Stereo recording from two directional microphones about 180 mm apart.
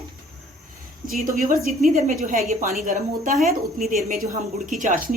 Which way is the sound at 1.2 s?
50° right (ahead or behind).